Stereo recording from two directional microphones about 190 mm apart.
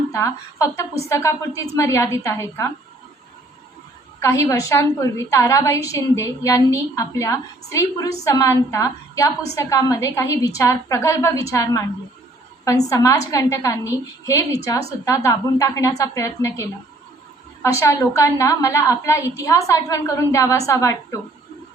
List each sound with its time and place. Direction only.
0.1 s a woman's voice: 15° left (ahead or behind)
4.2 s a woman's voice: 15° left (ahead or behind)